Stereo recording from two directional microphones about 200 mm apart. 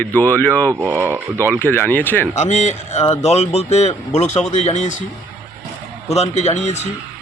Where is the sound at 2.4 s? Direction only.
35° left (ahead or behind).